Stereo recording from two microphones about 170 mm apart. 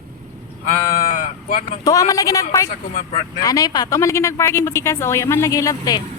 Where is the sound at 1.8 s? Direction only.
20° left (ahead or behind).